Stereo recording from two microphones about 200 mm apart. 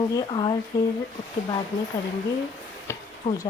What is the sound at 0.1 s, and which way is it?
Speech, 20° left (ahead or behind).